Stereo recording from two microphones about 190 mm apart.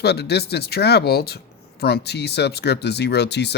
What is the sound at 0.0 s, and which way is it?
Speech, 60° left (ahead or behind).